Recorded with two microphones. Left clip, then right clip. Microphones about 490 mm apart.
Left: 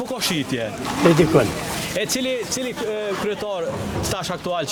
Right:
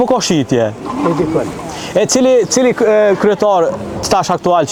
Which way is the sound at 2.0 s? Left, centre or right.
Right.